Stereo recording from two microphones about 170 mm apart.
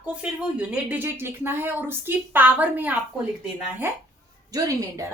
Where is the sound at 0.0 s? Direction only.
5° right (ahead or behind).